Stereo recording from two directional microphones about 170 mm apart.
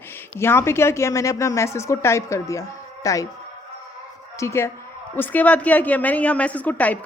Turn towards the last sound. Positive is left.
turn(degrees=10)  # may be behind; listen again after turning